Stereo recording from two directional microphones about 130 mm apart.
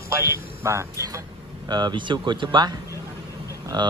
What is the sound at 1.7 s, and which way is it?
Speech, 35° right (ahead or behind).